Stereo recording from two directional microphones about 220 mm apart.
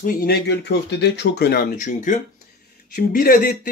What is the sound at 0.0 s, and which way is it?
Speech, 40° left (ahead or behind).